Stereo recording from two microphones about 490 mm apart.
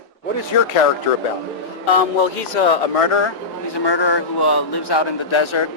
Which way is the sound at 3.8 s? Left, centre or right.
Left.